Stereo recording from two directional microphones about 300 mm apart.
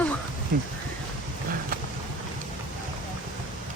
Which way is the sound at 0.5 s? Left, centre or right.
Right.